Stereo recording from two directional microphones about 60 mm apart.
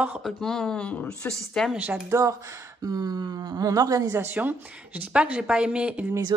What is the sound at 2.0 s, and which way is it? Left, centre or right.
Speech, right.